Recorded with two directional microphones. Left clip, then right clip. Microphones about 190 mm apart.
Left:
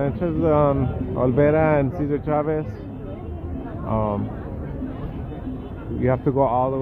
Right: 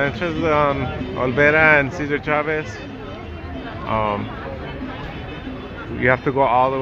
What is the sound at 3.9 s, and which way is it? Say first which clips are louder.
Speech: right 4 dB; 5° left (ahead or behind).